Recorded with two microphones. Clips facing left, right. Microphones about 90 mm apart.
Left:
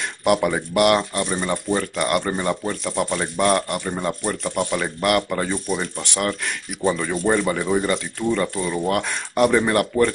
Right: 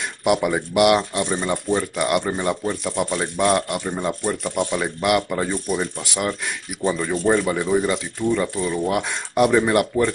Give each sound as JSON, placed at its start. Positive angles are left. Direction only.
{"t": 0.2, "sound": "speech", "side_deg": -10}
{"t": 8.9, "sound": "speech", "side_deg": -15}
{"t": 9.5, "sound": "speech", "side_deg": -5}